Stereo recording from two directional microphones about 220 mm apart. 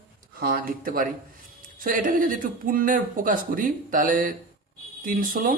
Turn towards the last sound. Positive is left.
turn(degrees=-40)  # may be behind; listen again after turning